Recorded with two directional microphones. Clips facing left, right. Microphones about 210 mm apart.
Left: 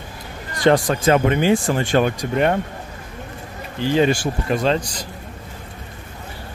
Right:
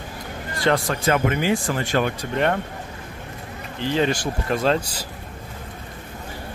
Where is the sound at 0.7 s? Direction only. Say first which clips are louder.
Left 5 dB; 20° left (ahead or behind).